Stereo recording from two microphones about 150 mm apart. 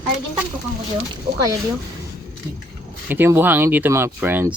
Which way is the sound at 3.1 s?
15° right (ahead or behind).